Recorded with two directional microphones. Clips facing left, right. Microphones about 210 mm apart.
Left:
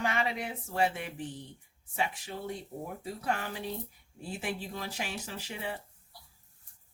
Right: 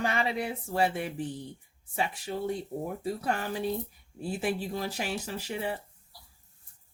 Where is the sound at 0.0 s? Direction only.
35° right (ahead or behind).